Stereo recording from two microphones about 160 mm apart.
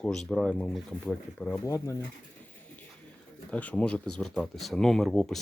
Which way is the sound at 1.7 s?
20° left (ahead or behind).